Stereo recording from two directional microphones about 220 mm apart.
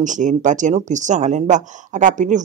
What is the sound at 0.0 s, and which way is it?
Speech, 35° right (ahead or behind).